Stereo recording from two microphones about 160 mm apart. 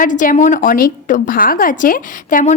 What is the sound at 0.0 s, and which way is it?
A woman's voice, 55° left (ahead or behind).